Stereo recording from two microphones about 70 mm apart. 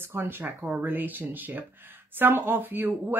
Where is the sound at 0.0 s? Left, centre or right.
Right.